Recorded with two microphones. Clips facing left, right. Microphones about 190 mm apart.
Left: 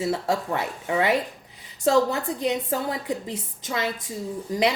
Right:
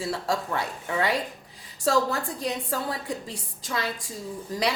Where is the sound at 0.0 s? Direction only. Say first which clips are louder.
Left 3 dB; 20° left (ahead or behind).